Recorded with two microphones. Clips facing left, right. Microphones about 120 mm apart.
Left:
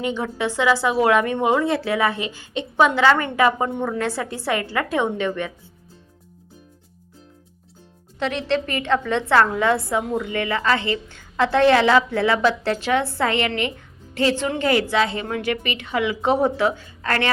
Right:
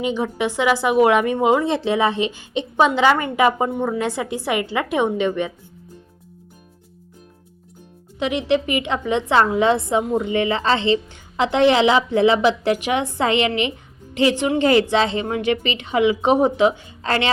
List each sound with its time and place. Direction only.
0.0 s a woman's voice: 15° right (ahead or behind)
8.2 s a woman's voice: 15° right (ahead or behind)